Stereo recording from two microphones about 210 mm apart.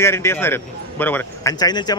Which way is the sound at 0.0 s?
10° left (ahead or behind).